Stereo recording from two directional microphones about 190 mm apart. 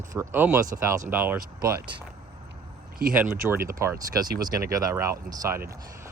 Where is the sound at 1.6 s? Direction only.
55° right (ahead or behind).